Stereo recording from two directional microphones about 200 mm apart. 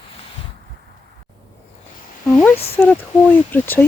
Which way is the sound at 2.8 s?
5° left (ahead or behind).